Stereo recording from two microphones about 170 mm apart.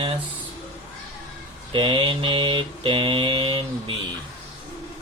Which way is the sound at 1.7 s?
30° right (ahead or behind).